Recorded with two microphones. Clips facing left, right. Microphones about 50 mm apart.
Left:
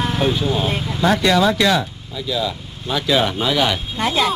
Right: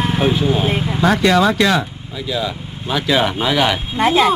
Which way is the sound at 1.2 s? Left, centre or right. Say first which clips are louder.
Right 3 dB; right.